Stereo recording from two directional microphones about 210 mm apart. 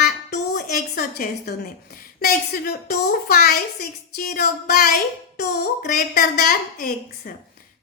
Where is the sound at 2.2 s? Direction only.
50° left (ahead or behind).